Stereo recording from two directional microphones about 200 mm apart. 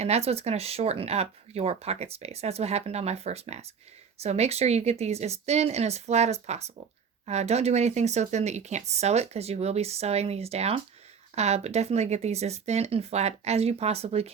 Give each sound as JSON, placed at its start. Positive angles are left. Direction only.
{"t": 0.0, "sound": "speech", "side_deg": -30}